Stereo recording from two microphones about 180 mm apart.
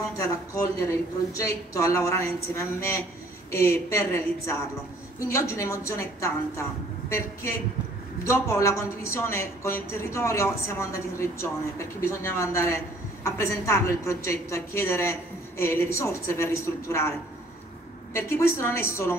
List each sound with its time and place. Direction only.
1.3 s a woman's voice: 15° left (ahead or behind)
18.1 s a woman's voice: 15° left (ahead or behind)